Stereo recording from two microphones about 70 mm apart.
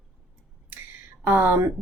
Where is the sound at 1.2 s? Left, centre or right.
Right.